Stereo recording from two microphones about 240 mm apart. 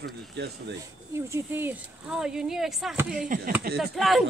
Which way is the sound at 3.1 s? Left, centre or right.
Right.